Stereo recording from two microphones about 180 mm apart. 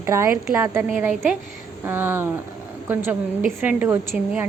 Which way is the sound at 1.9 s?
10° right (ahead or behind).